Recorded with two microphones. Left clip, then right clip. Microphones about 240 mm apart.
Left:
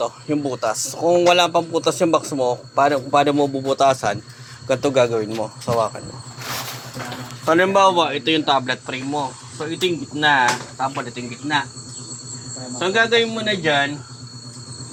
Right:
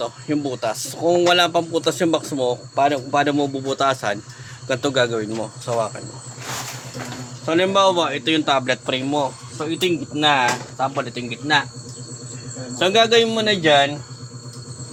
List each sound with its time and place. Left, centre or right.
0.0 s a man's voice: centre
7.4 s a man's voice: centre; by 11.6 s right
12.8 s a man's voice: centre